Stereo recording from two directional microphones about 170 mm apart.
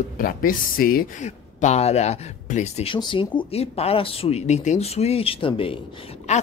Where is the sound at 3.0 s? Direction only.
30° left (ahead or behind).